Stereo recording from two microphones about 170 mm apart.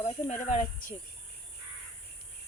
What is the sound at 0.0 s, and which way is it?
Speech, 40° left (ahead or behind).